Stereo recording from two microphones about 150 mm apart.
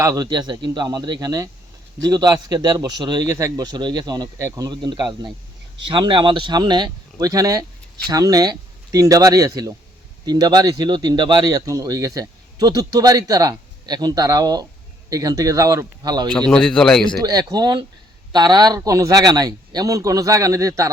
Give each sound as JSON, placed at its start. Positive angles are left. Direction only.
{"t": 0.0, "sound": "speech", "side_deg": -25}
{"t": 16.3, "sound": "a man's voice", "side_deg": 5}
{"t": 17.2, "sound": "speech", "side_deg": -25}